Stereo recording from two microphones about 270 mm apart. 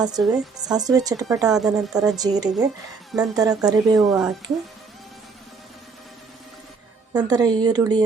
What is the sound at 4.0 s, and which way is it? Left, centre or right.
Speech, centre.